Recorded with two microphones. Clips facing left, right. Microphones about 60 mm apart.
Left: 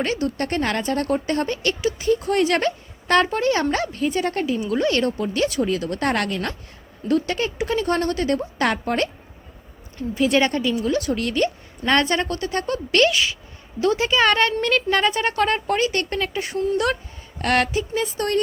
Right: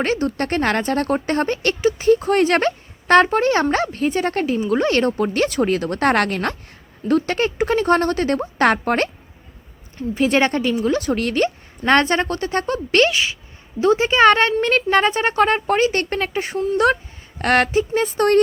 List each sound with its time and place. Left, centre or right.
0.0 s speech: right
5.1 s a woman's voice: right
10.2 s a woman's voice: right